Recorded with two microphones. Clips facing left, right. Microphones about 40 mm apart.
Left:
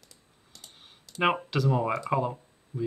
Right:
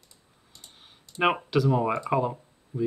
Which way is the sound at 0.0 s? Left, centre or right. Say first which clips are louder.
Even; left.